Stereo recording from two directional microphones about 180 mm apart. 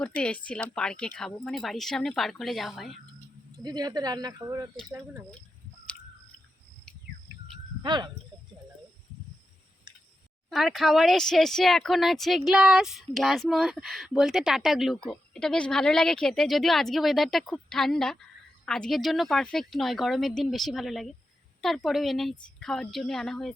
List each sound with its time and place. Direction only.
0.0 s speech: 5° left (ahead or behind)
3.6 s speech: 25° right (ahead or behind)
7.8 s speech: 25° right (ahead or behind)
10.5 s speech: centre (ahead or behind)